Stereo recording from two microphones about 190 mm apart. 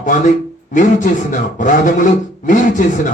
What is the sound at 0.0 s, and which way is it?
A man's voice, 45° left (ahead or behind).